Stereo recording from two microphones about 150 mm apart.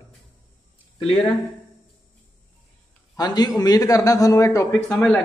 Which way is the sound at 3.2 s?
25° left (ahead or behind).